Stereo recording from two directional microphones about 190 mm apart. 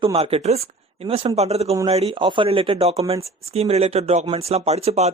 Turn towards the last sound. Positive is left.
turn(degrees=-35)  # may be behind; listen again after turning